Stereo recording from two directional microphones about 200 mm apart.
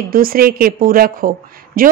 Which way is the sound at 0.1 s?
45° right (ahead or behind).